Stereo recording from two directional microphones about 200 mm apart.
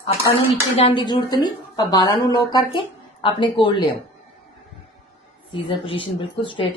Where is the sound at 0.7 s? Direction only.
25° left (ahead or behind).